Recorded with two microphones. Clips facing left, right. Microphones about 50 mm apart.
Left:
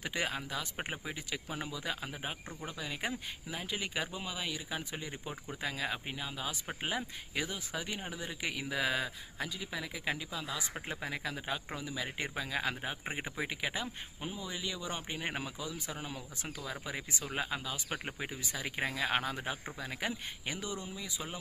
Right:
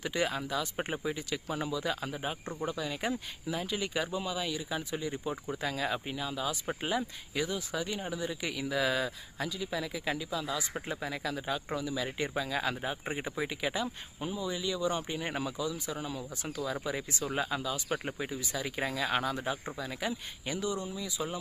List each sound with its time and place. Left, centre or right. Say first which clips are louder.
0.0 s speech: right 4 dB; centre
5.5 s speech: right 1 dB; centre